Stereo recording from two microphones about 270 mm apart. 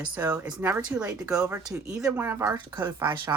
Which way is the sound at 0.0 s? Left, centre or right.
Centre.